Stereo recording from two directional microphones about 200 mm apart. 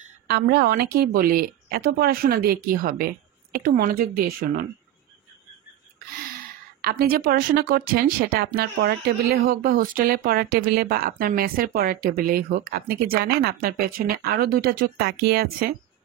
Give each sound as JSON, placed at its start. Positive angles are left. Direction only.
{"t": 0.3, "sound": "speech", "side_deg": -50}
{"t": 6.8, "sound": "speech", "side_deg": -50}